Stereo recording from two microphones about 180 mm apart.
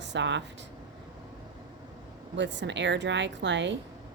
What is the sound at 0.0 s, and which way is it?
Speech, 80° right.